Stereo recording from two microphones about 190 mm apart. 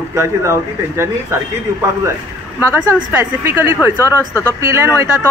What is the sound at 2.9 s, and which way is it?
A man's voice, 10° right (ahead or behind).